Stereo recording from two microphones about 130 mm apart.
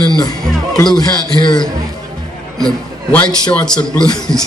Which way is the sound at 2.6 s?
10° left (ahead or behind).